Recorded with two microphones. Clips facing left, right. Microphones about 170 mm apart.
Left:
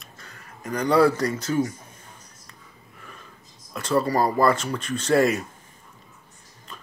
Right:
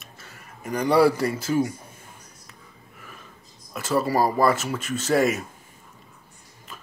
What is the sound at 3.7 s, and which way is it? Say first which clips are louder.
Speech: left 1 dB; 5° right (ahead or behind).